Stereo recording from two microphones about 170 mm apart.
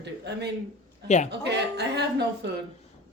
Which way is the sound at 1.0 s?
40° left (ahead or behind).